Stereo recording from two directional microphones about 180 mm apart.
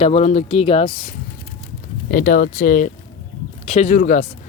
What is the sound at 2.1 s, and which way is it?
Speech, 55° left (ahead or behind).